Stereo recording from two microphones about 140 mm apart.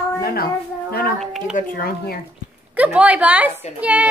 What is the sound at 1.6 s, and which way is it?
Speech, 90° left.